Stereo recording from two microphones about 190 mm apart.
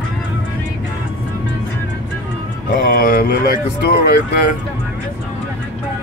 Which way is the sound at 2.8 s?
50° left (ahead or behind).